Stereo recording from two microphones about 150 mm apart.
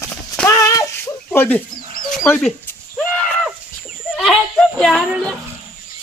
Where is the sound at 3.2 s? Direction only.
5° left (ahead or behind).